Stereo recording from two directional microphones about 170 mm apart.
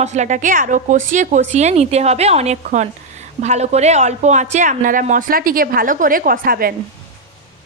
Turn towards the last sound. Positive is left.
turn(degrees=-60)  # may be behind; listen again after turning